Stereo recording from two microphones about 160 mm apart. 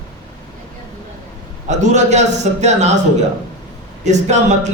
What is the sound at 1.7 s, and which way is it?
Speech, 50° right (ahead or behind).